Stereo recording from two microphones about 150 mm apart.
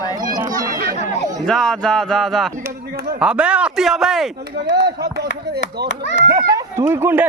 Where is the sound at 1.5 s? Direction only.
5° left (ahead or behind).